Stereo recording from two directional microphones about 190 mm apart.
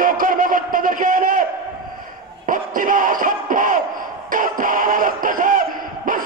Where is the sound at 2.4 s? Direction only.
45° right (ahead or behind).